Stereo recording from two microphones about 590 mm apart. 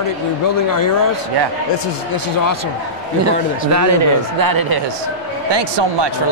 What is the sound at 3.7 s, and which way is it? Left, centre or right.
Speech, right.